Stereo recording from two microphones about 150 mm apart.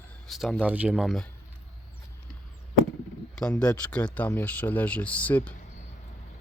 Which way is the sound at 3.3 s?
5° left (ahead or behind).